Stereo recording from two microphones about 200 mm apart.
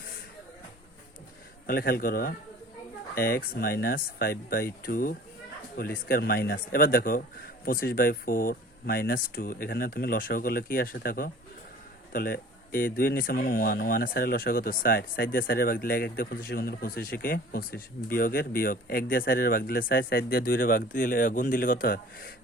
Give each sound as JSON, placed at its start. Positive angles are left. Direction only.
{"t": 1.6, "sound": "speech", "side_deg": 50}